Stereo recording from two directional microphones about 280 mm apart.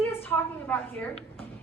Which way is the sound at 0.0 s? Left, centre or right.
Centre.